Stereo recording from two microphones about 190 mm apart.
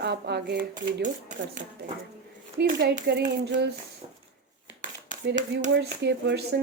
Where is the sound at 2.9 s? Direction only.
40° right (ahead or behind).